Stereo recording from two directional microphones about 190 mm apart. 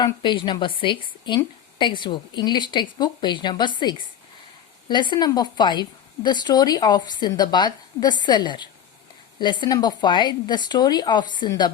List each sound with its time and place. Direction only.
0.0 s a woman's voice: 25° left (ahead or behind)